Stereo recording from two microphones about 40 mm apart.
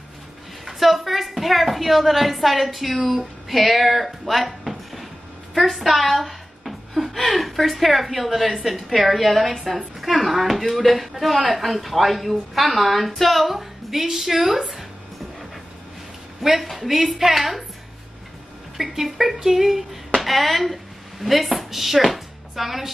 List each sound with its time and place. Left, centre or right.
0.7 s a woman's voice: centre
5.5 s a sound: centre
7.3 s speech: centre
16.4 s speech: centre
18.8 s a woman's voice: centre